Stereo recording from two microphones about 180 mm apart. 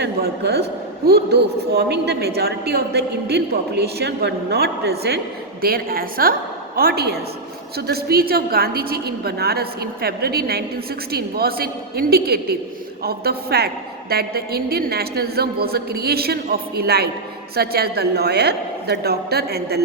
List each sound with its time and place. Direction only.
0.0 s a woman's voice: 65° right (ahead or behind)